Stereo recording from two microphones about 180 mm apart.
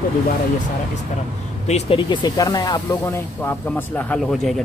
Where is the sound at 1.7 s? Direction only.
30° left (ahead or behind); by 4.6 s centre (ahead or behind).